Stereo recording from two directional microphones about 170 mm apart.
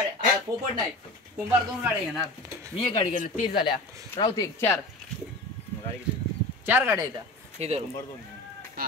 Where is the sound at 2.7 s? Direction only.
30° left (ahead or behind).